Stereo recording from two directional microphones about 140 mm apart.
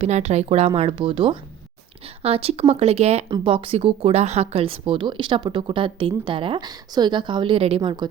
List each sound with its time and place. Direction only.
0.0 s speech: 50° right (ahead or behind); by 8.0 s 30° right (ahead or behind)